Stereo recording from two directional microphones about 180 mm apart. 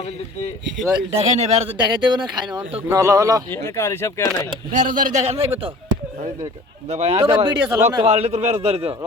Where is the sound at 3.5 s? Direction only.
15° left (ahead or behind).